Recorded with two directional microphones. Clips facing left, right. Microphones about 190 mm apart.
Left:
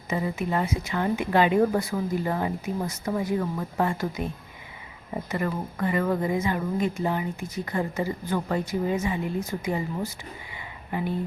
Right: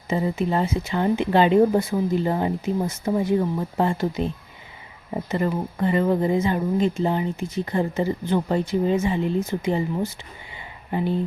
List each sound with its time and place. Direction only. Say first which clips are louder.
0.1 s a woman's voice: right 4 dB; 30° right (ahead or behind)
5.3 s a woman's voice: right 5 dB; 25° right (ahead or behind)